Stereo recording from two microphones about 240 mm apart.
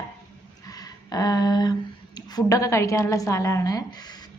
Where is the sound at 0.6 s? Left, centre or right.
Centre.